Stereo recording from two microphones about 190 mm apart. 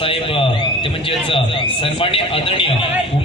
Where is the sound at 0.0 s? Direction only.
30° left (ahead or behind).